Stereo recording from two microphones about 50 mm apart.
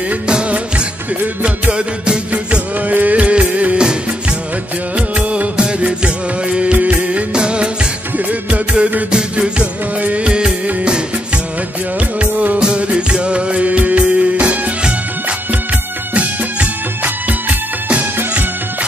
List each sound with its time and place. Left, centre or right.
0.3 s music: right
2.9 s music: right
4.9 s music of bollywood: right
7.3 s music: centre
12.2 s music: right